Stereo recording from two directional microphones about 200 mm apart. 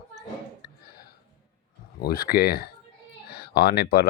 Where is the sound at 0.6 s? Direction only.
50° left (ahead or behind).